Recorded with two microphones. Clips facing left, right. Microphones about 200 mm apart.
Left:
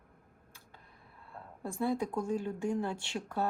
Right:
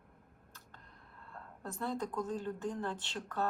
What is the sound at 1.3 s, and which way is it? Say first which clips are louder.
Speech: left 4 dB; 10° left (ahead or behind).